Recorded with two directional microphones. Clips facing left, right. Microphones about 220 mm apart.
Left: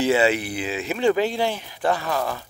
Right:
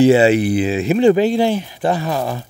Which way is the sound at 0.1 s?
30° right (ahead or behind).